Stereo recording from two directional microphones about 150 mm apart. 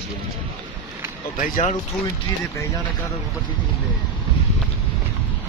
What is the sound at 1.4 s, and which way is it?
Speech, 55° left (ahead or behind).